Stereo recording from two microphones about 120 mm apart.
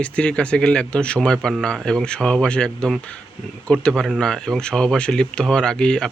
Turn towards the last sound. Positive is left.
turn(degrees=5)  # may be behind; listen again after turning